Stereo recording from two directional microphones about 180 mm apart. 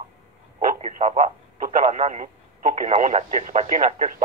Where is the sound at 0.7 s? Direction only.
40° right (ahead or behind).